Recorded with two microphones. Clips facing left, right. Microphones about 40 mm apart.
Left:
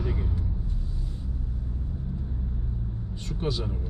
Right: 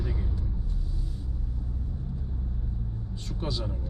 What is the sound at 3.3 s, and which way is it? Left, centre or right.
Speech, left.